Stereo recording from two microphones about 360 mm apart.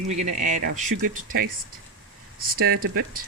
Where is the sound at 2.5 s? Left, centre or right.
Right.